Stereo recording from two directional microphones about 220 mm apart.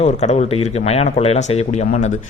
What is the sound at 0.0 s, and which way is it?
Speech, 30° left (ahead or behind).